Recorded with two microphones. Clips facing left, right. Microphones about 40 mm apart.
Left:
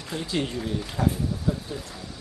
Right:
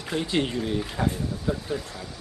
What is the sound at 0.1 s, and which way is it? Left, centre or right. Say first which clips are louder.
Speech: right 3 dB; right.